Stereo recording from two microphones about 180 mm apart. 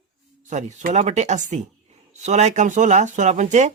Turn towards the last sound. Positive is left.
turn(degrees=-40)  # may be behind; listen again after turning